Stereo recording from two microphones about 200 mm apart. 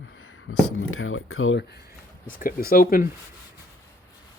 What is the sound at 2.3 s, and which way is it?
Speech, 45° left (ahead or behind).